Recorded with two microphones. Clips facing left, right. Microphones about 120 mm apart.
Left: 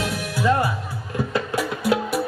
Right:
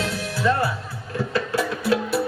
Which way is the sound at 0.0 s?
15° left (ahead or behind).